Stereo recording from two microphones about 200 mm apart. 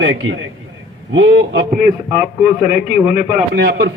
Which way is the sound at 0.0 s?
70° right (ahead or behind).